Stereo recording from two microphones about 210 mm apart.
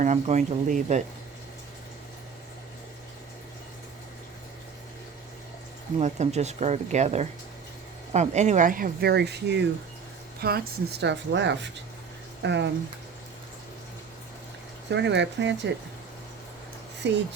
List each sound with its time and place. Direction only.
0.0 s speech: 35° right (ahead or behind)
6.0 s speech: 30° right (ahead or behind); by 12.7 s 55° right (ahead or behind)
14.8 s speech: 55° right (ahead or behind)
17.0 s speech: 55° right (ahead or behind)